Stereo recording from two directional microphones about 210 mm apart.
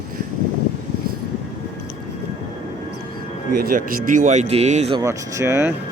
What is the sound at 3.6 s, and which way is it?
Speech, 40° right (ahead or behind).